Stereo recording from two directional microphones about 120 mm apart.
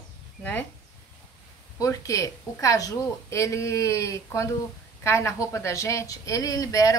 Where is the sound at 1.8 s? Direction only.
25° left (ahead or behind).